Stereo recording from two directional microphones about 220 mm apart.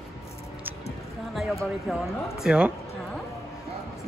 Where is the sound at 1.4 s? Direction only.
Centre (ahead or behind).